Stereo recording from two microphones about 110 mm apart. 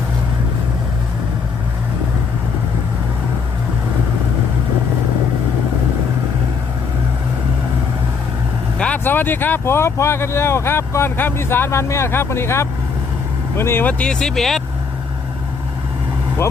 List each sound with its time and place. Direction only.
8.8 s speech: 15° left (ahead or behind)